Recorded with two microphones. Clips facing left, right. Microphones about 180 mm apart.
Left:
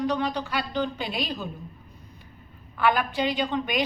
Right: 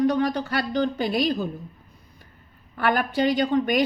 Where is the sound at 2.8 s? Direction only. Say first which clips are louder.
Right 2 dB; 50° right (ahead or behind).